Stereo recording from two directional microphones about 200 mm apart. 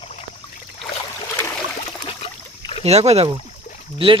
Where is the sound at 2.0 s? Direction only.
25° left (ahead or behind).